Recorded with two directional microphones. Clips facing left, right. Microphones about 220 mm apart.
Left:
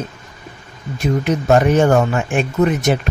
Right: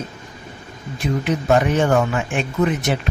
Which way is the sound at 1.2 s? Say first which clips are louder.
Left 3 dB; 45° left (ahead or behind).